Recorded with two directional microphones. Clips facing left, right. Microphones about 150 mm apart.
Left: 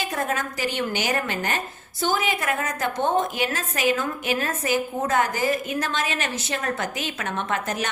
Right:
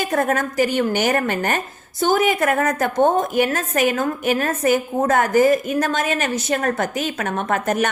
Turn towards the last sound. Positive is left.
turn(degrees=-50)  # may be behind; listen again after turning